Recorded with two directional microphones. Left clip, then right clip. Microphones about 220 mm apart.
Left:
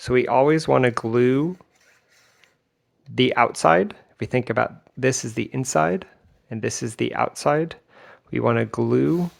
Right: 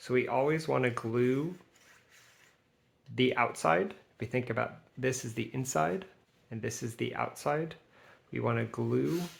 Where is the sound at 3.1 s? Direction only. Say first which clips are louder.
Left 10 dB; 45° left (ahead or behind).